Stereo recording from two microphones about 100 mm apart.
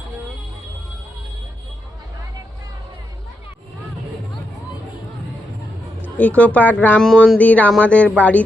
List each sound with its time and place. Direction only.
6.0 s speech: 15° left (ahead or behind)
7.0 s a sound: 5° left (ahead or behind)
7.3 s speech: 15° left (ahead or behind)